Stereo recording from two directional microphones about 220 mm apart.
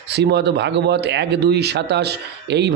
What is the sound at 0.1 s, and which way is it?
A man's voice, 50° right (ahead or behind).